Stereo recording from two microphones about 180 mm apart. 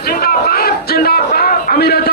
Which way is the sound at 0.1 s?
55° left (ahead or behind).